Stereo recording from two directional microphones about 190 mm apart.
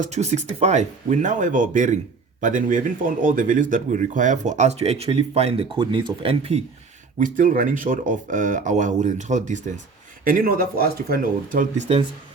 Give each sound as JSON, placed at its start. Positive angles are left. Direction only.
{"t": 0.0, "sound": "speech", "side_deg": -35}
{"t": 7.2, "sound": "speech", "side_deg": -45}